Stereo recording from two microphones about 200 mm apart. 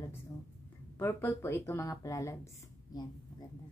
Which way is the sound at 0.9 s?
10° left (ahead or behind).